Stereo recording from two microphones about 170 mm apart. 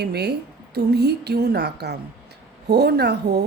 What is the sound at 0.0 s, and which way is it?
A woman's voice, 75° right (ahead or behind).